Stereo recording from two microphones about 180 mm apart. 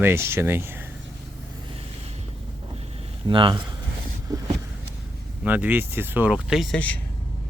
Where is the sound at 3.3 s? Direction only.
25° right (ahead or behind).